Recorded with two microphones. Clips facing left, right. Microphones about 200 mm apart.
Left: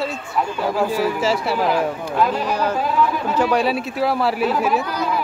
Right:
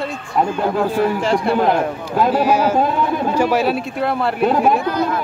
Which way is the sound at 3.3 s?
5° right (ahead or behind).